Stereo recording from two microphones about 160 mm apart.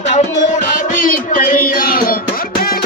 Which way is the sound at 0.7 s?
55° left (ahead or behind).